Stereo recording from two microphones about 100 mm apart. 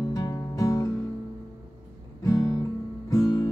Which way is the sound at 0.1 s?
35° left (ahead or behind).